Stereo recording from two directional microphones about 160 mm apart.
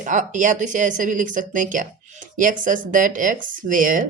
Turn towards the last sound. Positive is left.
turn(degrees=-55)  # may be behind; listen again after turning